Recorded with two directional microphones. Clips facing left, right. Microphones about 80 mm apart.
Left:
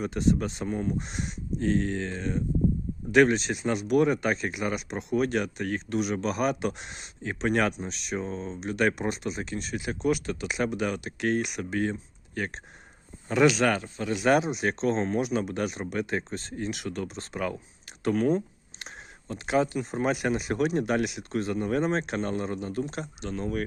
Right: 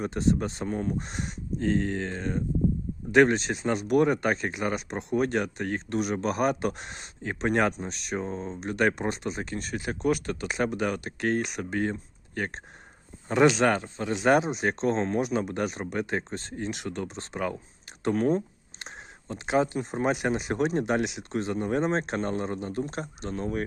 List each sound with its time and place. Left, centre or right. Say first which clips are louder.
0.0 s speech: even; right
0.7 s speech: even; right